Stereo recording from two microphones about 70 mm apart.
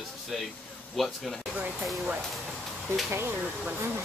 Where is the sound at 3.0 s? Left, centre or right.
Right.